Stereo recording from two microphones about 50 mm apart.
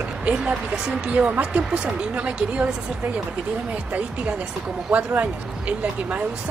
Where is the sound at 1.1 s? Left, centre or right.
Right.